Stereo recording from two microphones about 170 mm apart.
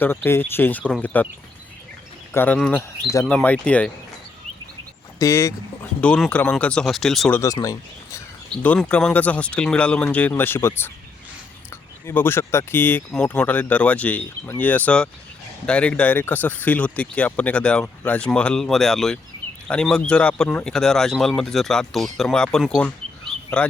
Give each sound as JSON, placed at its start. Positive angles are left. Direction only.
{"t": 0.0, "sound": "speech", "side_deg": 10}
{"t": 2.3, "sound": "speech", "side_deg": 10}
{"t": 5.2, "sound": "speech", "side_deg": 20}
{"t": 6.0, "sound": "speech", "side_deg": 5}
{"t": 7.3, "sound": "speech", "side_deg": 20}
{"t": 8.6, "sound": "speech", "side_deg": 10}
{"t": 12.0, "sound": "speech", "side_deg": 15}